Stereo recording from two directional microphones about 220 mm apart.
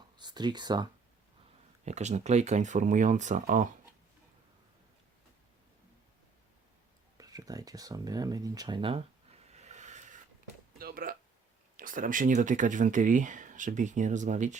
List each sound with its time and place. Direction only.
0.2 s speech: 20° right (ahead or behind)
1.8 s speech: 30° right (ahead or behind)
7.2 s speech: 15° right (ahead or behind)
9.5 s a sound: 30° right (ahead or behind)
11.8 s speech: 40° right (ahead or behind)